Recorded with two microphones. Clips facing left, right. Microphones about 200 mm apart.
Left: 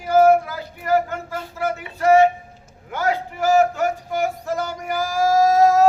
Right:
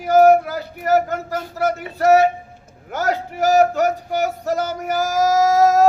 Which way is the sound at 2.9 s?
40° right (ahead or behind).